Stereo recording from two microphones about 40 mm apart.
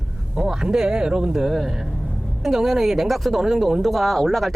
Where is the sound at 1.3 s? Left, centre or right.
Centre.